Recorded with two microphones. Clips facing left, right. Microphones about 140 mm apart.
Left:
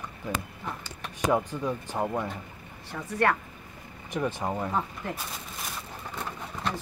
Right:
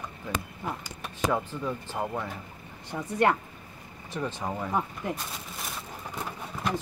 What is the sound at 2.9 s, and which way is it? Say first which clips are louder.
Speech: right 2 dB; 20° right (ahead or behind).